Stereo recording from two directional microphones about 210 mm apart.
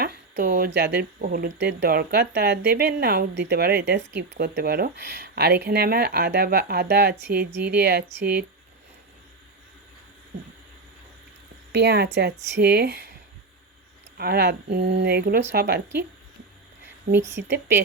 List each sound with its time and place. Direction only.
0.0 s speech: 50° right (ahead or behind)
11.7 s speech: 55° right (ahead or behind)
14.2 s speech: 50° right (ahead or behind)
17.1 s speech: 10° right (ahead or behind)